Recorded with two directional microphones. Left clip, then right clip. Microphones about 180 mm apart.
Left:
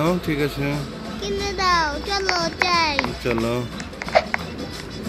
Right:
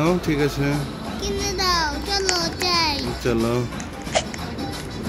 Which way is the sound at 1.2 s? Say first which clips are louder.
Left 2 dB; 55° left (ahead or behind).